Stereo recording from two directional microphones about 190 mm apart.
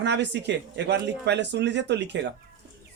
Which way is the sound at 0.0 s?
65° right (ahead or behind).